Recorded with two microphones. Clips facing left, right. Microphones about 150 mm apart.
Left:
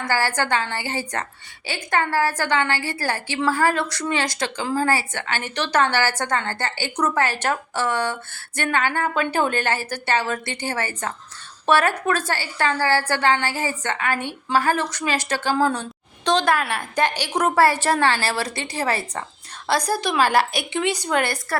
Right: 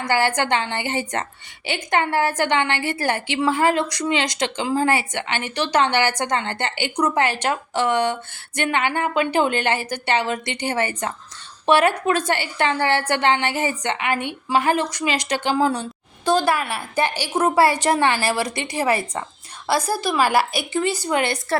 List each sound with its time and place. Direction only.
0.1 s a woman's voice: 20° right (ahead or behind); by 21.2 s 5° right (ahead or behind)
21.2 s a woman's voice: 20° right (ahead or behind)